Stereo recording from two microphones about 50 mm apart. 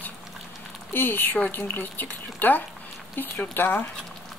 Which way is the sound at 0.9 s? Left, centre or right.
Left.